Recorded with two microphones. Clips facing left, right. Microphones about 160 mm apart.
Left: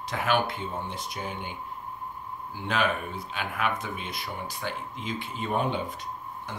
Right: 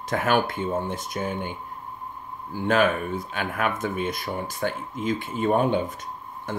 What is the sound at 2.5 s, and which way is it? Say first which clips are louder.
Speech: right 7 dB; 45° right (ahead or behind).